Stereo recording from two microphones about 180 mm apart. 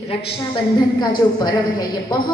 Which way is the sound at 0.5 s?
25° left (ahead or behind).